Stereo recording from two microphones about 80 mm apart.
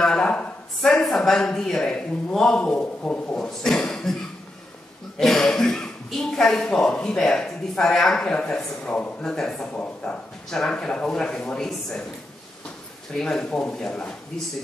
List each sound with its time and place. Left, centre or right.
0.0 s a sound: centre
0.8 s speech: centre
5.2 s speech: centre
13.1 s speech: centre